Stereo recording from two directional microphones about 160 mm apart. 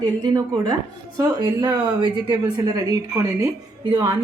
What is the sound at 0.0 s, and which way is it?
A woman's voice, 25° right (ahead or behind).